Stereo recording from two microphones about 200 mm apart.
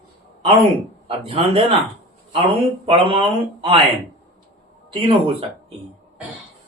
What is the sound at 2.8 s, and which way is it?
Speech, 30° right (ahead or behind).